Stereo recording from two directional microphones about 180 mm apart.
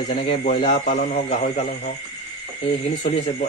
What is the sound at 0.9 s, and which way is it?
Speech, 40° left (ahead or behind).